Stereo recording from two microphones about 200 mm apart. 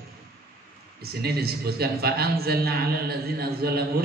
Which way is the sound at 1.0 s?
50° right (ahead or behind).